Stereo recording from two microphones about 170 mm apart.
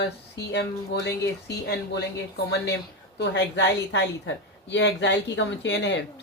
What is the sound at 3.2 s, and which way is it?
A woman's voice, 90° left.